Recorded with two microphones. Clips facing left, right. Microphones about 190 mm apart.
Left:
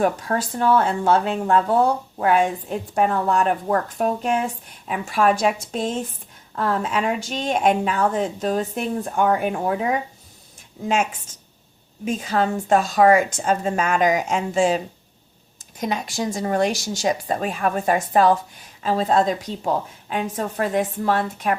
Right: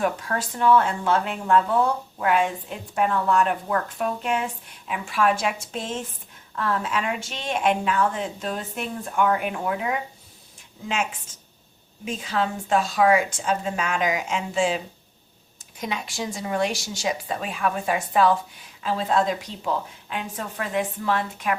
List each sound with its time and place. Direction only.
0.0 s a woman's voice: 40° left (ahead or behind)
15.8 s a woman's voice: 40° left (ahead or behind)